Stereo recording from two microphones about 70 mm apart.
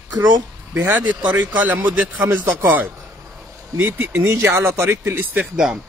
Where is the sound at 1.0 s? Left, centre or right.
Right.